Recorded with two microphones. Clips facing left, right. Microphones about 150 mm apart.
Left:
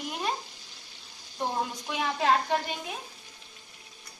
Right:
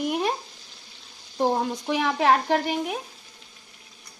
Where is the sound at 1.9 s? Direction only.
70° right (ahead or behind).